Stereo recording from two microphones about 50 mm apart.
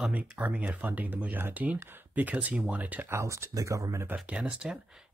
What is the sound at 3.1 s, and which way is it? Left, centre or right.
Speech, right.